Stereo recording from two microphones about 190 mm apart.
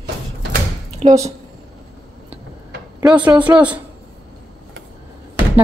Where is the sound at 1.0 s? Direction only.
30° right (ahead or behind).